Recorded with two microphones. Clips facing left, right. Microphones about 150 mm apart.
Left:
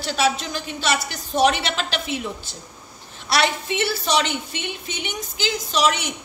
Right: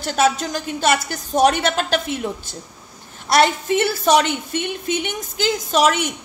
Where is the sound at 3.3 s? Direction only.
45° right (ahead or behind).